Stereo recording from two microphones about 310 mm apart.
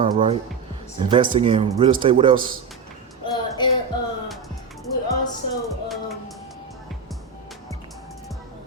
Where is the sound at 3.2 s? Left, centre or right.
Centre.